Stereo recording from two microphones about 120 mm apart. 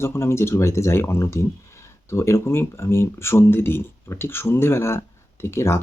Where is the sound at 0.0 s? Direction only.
20° left (ahead or behind).